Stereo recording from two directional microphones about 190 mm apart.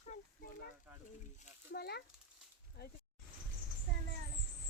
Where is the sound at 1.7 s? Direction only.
60° left (ahead or behind).